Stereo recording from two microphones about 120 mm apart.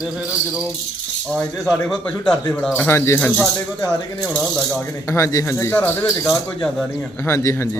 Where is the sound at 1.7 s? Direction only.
5° left (ahead or behind).